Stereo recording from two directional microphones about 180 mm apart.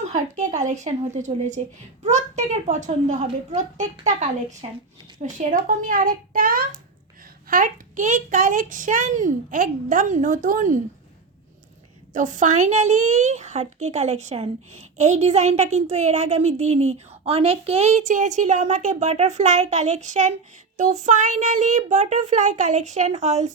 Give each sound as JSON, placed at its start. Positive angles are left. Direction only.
{"t": 0.0, "sound": "a sound", "side_deg": -40}
{"t": 0.5, "sound": "a woman's voice", "side_deg": -40}
{"t": 12.1, "sound": "a woman's voice", "side_deg": -45}